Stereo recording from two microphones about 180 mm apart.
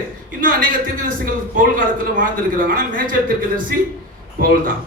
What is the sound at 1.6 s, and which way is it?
A man's voice, 50° right (ahead or behind).